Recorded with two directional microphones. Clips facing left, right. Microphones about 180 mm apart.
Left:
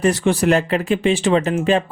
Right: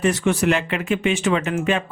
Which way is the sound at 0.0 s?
35° left (ahead or behind).